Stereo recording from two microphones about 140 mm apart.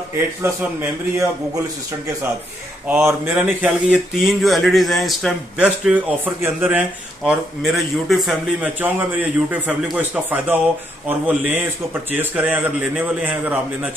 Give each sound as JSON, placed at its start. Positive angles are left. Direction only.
{"t": 0.4, "sound": "a man's voice", "side_deg": -15}
{"t": 2.9, "sound": "speech", "side_deg": -20}
{"t": 3.3, "sound": "speech", "side_deg": -5}
{"t": 7.2, "sound": "a man's voice", "side_deg": 0}